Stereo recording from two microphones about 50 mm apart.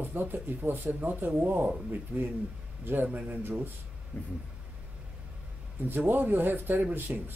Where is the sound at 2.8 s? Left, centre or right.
Right.